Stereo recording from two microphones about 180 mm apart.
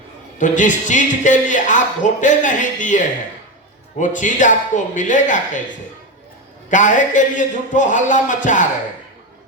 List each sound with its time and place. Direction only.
0.3 s a man's voice: 45° left (ahead or behind)
6.7 s a man's voice: 45° left (ahead or behind)